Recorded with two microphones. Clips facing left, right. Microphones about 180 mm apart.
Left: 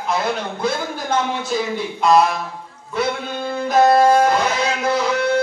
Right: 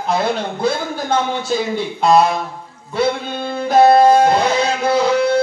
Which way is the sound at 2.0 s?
30° right (ahead or behind).